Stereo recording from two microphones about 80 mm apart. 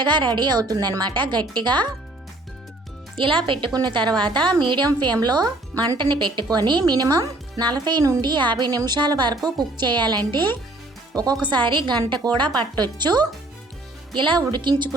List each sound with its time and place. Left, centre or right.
0.0 s speech: right
0.6 s speech: right
3.2 s speech: right
3.7 s speech: right
4.2 s a woman's voice: right
6.0 s speech: right
8.2 s speech: right
11.1 s speech: right
11.4 s speech: right
14.1 s speech: right